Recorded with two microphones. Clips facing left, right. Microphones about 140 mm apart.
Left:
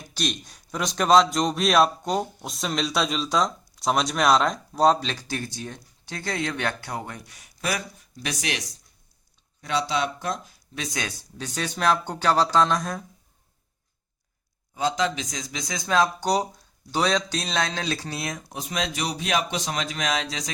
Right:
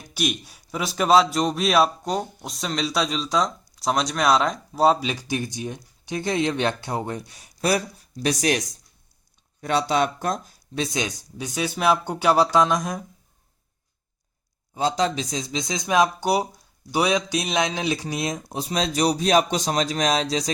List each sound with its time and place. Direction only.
0.1 s a man's voice: 10° right (ahead or behind); by 8.6 s 40° right (ahead or behind)
9.6 s speech: 55° right (ahead or behind)
10.8 s speech: 20° right (ahead or behind)
14.8 s speech: 35° right (ahead or behind)